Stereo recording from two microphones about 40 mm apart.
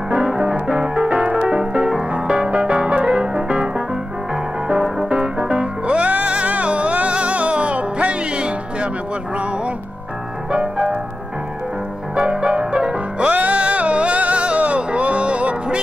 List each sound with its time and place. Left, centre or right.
0.1 s music: centre
0.8 s music: right
10.5 s music: right
12.2 s music: right